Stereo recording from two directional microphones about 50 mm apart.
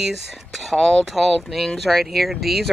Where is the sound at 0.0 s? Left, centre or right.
Centre.